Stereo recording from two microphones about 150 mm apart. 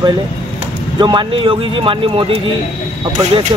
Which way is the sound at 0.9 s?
30° right (ahead or behind).